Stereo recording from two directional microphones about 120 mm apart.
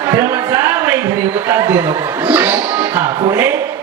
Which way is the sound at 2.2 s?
15° right (ahead or behind).